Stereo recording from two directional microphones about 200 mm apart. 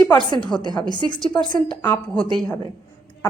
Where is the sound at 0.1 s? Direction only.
20° left (ahead or behind).